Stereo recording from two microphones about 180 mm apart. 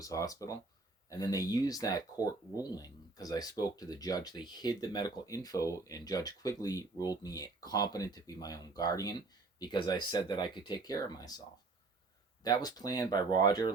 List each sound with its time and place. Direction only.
0.0 s speech: 20° left (ahead or behind)